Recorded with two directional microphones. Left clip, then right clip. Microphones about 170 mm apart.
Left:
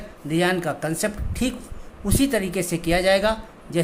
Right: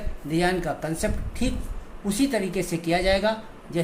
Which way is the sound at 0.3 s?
20° left (ahead or behind).